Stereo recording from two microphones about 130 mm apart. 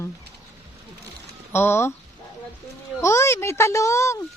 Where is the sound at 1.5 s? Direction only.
20° left (ahead or behind).